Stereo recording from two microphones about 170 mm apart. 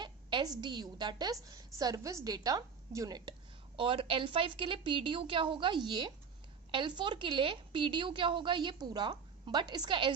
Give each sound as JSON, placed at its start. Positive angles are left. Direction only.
{"t": 0.0, "sound": "a woman's voice", "side_deg": -25}